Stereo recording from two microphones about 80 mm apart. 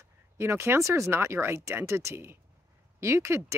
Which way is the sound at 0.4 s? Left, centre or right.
Right.